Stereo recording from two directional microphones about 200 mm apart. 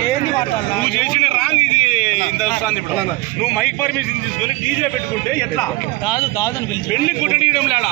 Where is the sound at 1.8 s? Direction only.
35° left (ahead or behind).